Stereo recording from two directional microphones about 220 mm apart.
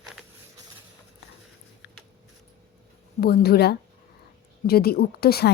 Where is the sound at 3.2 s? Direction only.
45° left (ahead or behind).